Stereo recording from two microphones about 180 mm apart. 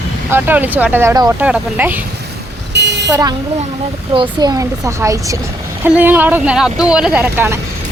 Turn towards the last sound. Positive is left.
turn(degrees=-10)  # may be behind; listen again after turning